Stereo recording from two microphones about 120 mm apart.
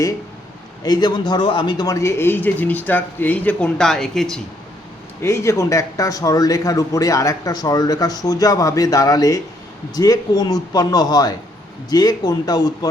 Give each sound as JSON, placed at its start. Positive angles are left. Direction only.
{"t": 0.8, "sound": "speech", "side_deg": 35}
{"t": 5.2, "sound": "a man's voice", "side_deg": 25}